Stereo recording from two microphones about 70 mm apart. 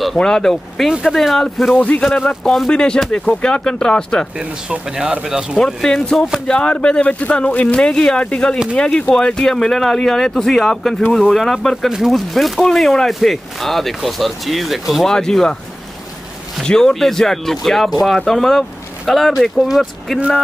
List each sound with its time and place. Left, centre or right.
0.0 s speech: centre
1.8 s a man's voice: left
4.4 s speech: centre
5.7 s speech: centre
6.4 s speech: centre
15.1 s speech: centre
16.6 s speech: centre